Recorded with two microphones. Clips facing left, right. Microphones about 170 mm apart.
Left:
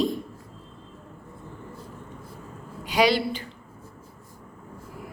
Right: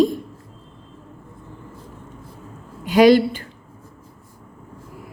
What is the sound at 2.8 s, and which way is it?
Speech, 45° right (ahead or behind).